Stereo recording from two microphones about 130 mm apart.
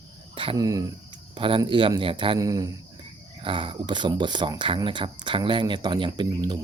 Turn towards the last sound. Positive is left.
turn(degrees=-35)  # may be behind; listen again after turning